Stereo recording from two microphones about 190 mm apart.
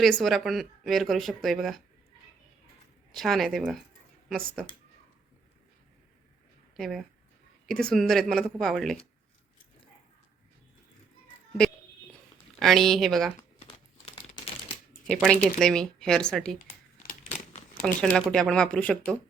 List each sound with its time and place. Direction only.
0.0 s speech: centre (ahead or behind)
3.1 s speech: centre (ahead or behind)
6.7 s speech: centre (ahead or behind)
12.5 s speech: centre (ahead or behind)
13.6 s crumpling: 30° left (ahead or behind)
15.0 s speech: 5° left (ahead or behind)
17.8 s speech: 5° left (ahead or behind)